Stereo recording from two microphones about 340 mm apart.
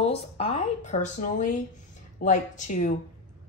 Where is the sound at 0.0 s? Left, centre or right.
Centre.